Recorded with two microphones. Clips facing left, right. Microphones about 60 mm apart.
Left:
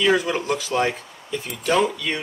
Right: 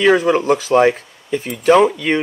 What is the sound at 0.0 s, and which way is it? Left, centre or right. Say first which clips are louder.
Speech: right 7 dB; right.